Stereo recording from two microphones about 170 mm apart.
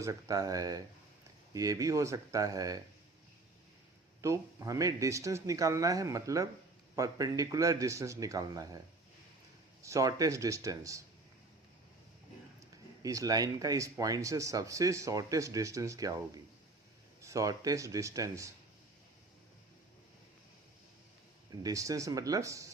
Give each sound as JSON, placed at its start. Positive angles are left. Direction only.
{"t": 0.0, "sound": "speech", "side_deg": -20}
{"t": 4.2, "sound": "speech", "side_deg": -20}
{"t": 9.8, "sound": "speech", "side_deg": -20}
{"t": 13.0, "sound": "speech", "side_deg": -20}
{"t": 21.5, "sound": "speech", "side_deg": -20}